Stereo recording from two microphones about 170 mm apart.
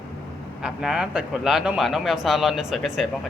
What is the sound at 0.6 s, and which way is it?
Speech, 5° right (ahead or behind).